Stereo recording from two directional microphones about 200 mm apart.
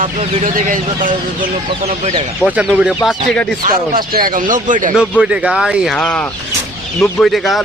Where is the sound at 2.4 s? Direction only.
5° right (ahead or behind).